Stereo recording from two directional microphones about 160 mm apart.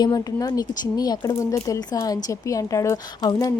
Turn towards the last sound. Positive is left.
turn(degrees=25)  # may be behind; listen again after turning